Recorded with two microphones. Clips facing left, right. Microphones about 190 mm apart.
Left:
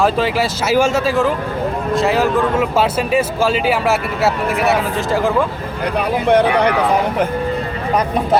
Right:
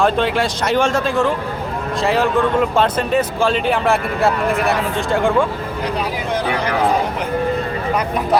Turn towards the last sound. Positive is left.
turn(degrees=60)  # may be behind; listen again after turning